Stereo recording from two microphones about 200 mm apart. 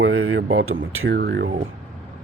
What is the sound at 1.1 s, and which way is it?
Speech, 55° right (ahead or behind).